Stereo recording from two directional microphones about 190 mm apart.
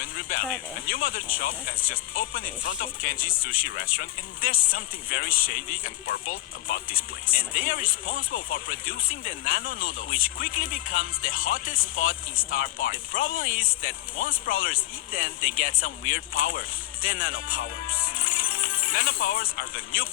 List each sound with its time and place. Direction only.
0.9 s speech: 50° left (ahead or behind)